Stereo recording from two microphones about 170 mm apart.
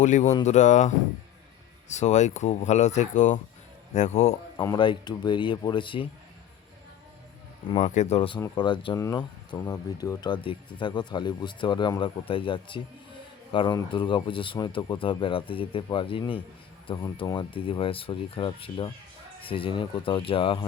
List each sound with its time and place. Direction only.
0.0 s speech: 45° left (ahead or behind)
4.6 s speech: 25° left (ahead or behind)
7.8 s speech: 45° left (ahead or behind)
8.4 s speech: 20° left (ahead or behind)